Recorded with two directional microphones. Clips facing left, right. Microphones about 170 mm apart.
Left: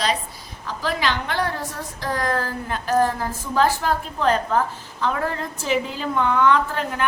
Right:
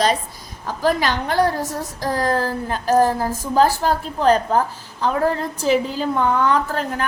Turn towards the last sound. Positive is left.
turn(degrees=-40)  # may be behind; listen again after turning